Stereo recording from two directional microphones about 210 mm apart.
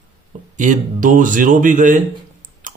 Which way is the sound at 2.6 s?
40° right (ahead or behind).